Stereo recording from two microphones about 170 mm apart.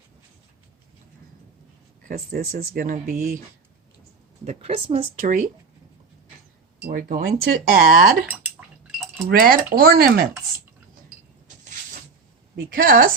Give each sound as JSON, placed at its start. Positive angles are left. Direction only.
{"t": 2.0, "sound": "speech", "side_deg": -60}
{"t": 4.4, "sound": "speech", "side_deg": -35}
{"t": 5.2, "sound": "speech", "side_deg": -50}
{"t": 6.8, "sound": "speech", "side_deg": -60}
{"t": 9.2, "sound": "speech", "side_deg": -60}
{"t": 12.7, "sound": "speech", "side_deg": -55}